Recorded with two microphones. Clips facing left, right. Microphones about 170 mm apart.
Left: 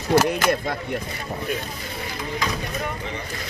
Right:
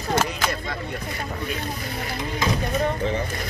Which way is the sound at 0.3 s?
55° left (ahead or behind).